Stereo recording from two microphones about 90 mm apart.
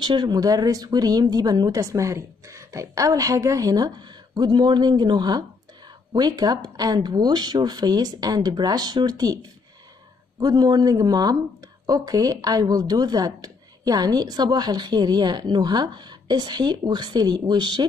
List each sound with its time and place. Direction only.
0.0 s a woman's voice: 55° right (ahead or behind)